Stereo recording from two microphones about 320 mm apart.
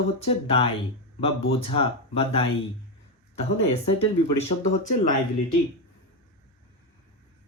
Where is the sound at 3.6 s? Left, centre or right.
Centre.